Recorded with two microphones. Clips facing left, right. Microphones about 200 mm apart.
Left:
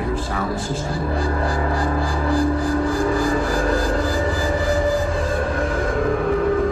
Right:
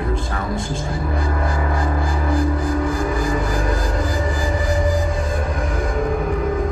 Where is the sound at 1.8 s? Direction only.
30° left (ahead or behind).